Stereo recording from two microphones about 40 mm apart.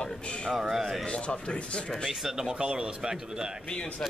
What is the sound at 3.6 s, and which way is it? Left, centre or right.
Speech, left.